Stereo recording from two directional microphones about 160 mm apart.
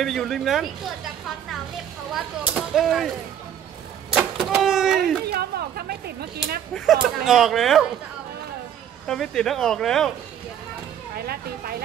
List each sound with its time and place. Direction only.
0.0 s speech: centre (ahead or behind)
2.1 s speech: centre (ahead or behind)
4.2 s a sound: 5° right (ahead or behind)
5.2 s speech: 85° right
6.7 s speech: centre (ahead or behind)
9.0 s speech: 5° left (ahead or behind)
11.1 s speech: 70° right (ahead or behind)